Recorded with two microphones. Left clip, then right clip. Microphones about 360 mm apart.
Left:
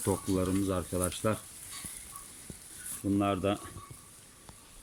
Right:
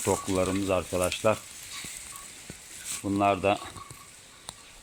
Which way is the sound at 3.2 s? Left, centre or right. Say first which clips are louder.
Right 7 dB; centre.